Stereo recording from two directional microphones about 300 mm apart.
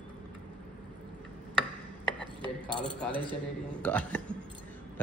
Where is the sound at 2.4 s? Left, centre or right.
Centre.